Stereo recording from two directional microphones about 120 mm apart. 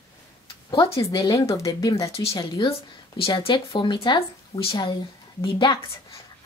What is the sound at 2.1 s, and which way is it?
Speech, 55° left (ahead or behind).